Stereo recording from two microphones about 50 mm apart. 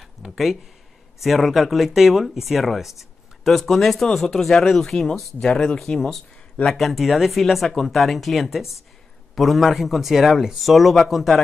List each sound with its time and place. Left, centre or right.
0.0 s a sound: centre
1.2 s speech: centre
5.4 s speech: centre